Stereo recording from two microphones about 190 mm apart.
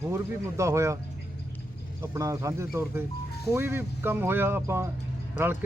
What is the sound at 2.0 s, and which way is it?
Speech, 15° right (ahead or behind).